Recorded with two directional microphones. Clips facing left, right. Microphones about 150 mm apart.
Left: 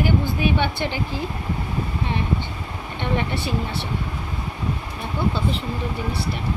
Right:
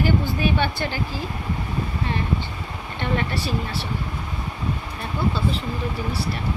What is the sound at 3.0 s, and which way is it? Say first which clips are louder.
Speech: even; 20° left (ahead or behind).